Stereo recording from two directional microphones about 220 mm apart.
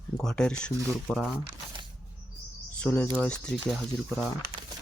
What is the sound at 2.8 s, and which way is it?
Speech, 5° left (ahead or behind).